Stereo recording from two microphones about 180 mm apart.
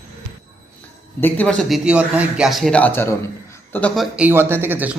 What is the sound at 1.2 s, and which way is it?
A man's voice, 5° left (ahead or behind).